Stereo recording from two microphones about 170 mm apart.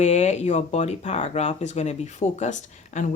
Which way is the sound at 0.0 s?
40° left (ahead or behind).